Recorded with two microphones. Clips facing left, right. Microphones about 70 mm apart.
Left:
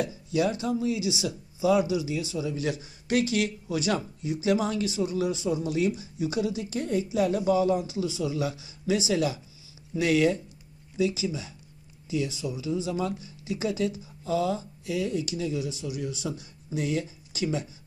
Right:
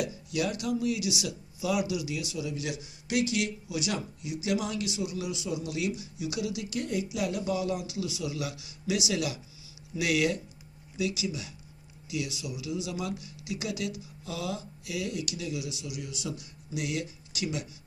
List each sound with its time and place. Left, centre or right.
0.0 s speech: left